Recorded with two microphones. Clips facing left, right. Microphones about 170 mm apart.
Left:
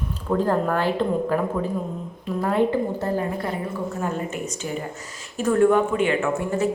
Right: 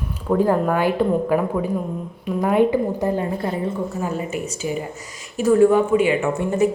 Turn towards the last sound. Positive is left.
turn(degrees=-20)  # may be behind; listen again after turning